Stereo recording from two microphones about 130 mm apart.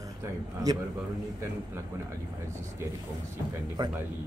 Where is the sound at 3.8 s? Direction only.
30° right (ahead or behind).